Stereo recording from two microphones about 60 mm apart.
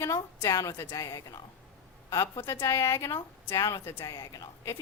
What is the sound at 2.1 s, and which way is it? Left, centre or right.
A woman's voice, left.